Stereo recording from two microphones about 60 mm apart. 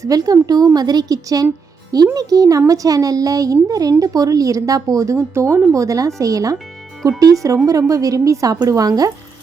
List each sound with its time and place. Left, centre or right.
0.0 s a woman's voice: right
5.7 s a woman's voice: right